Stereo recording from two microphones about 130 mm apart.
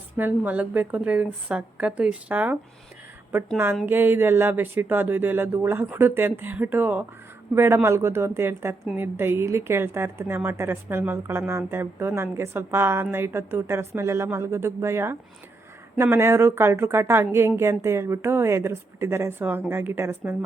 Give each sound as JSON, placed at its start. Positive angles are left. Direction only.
{"t": 0.2, "sound": "speech", "side_deg": -15}
{"t": 3.8, "sound": "a woman's voice", "side_deg": -15}